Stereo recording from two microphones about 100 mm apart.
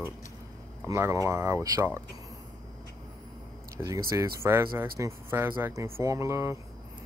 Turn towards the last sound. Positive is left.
turn(degrees=-25)  # may be behind; listen again after turning